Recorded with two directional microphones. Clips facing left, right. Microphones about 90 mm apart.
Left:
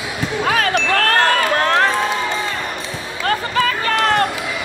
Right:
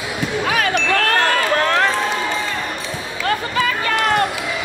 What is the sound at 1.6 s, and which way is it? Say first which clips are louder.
Run: left 1 dB; 40° left (ahead or behind).